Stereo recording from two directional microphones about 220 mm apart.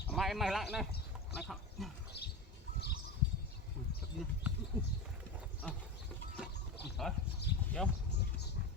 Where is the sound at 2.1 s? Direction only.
50° left (ahead or behind).